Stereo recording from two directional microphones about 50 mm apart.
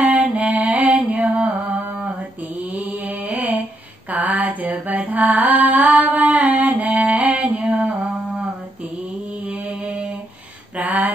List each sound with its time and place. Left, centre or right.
0.0 s mantra: right
1.2 s music: right
1.7 s mantra: right
9.4 s mantra: right
10.8 s a sound: right